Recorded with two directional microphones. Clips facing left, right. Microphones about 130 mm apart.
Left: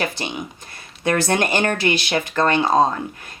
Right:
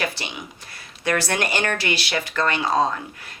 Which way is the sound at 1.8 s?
45° left (ahead or behind).